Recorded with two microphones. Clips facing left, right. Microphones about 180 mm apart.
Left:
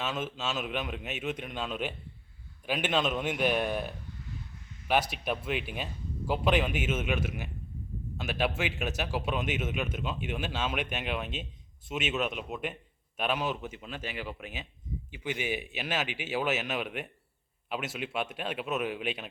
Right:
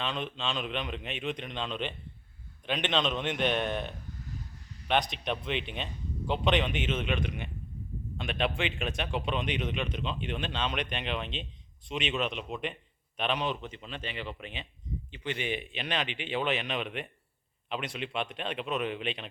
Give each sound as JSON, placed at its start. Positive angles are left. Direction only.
{"t": 0.0, "sound": "a man's voice", "side_deg": 5}
{"t": 4.3, "sound": "a sound", "side_deg": -35}
{"t": 4.9, "sound": "a man's voice", "side_deg": 5}